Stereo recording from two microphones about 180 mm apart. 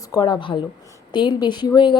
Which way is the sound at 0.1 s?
25° left (ahead or behind).